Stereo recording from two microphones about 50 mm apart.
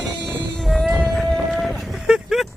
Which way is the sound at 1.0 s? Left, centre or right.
Centre.